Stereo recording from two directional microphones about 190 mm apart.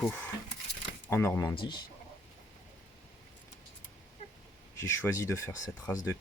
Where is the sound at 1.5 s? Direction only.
25° left (ahead or behind).